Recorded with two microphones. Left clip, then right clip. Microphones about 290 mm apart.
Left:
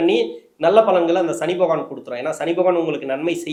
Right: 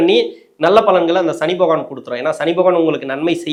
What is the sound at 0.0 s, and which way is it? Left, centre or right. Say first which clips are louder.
Speech: right 5 dB; right.